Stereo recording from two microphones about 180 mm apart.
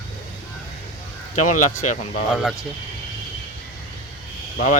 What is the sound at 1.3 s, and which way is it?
Speech, 45° left (ahead or behind).